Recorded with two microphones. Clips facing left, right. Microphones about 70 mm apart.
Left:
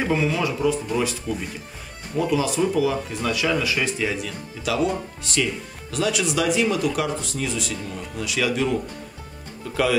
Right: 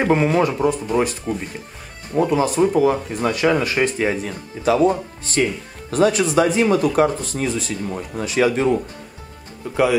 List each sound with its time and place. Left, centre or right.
0.0 s speech: right